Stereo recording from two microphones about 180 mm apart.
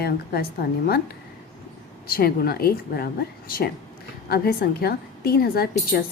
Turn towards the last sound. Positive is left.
turn(degrees=60)  # may be behind; listen again after turning